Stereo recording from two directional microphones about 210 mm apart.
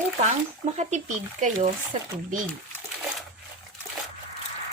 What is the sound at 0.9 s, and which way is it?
Speech, 35° right (ahead or behind).